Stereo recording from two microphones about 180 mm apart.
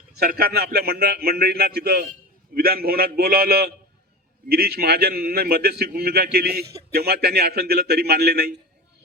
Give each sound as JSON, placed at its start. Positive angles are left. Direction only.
{"t": 0.2, "sound": "a man's voice", "side_deg": -60}